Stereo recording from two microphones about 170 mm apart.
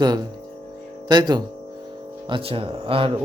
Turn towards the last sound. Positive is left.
turn(degrees=-30)  # may be behind; listen again after turning